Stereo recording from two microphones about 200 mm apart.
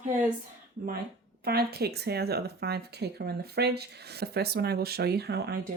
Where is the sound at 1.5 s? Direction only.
50° right (ahead or behind).